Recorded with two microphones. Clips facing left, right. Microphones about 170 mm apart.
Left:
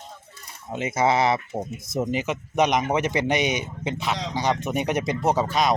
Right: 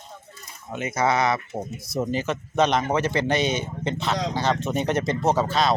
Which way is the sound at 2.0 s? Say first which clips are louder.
Even; 15° left (ahead or behind).